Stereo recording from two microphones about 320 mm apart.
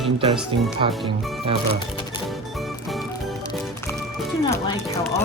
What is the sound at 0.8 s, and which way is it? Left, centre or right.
Speech, centre.